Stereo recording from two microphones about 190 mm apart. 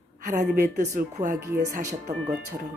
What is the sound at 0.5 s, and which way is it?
Speech, 40° right (ahead or behind).